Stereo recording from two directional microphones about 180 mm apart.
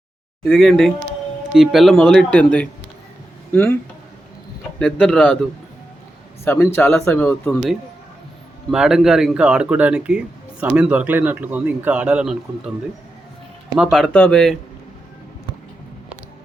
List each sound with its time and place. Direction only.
0.4 s speech: centre (ahead or behind)
4.8 s speech: 5° left (ahead or behind)
8.7 s speech: 5° right (ahead or behind)
13.9 s speech: 5° left (ahead or behind)